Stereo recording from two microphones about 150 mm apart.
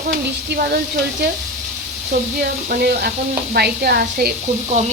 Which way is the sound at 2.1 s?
65° right (ahead or behind).